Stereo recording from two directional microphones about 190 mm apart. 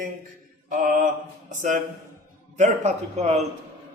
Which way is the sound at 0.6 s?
45° right (ahead or behind).